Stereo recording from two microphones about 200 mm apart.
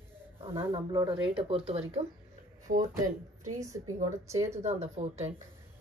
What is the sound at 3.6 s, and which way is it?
Speech, 15° right (ahead or behind).